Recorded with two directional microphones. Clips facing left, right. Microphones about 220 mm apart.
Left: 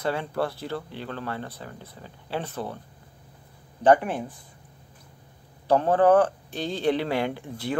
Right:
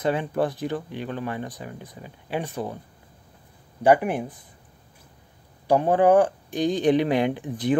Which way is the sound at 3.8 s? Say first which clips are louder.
Right 1 dB; 10° right (ahead or behind).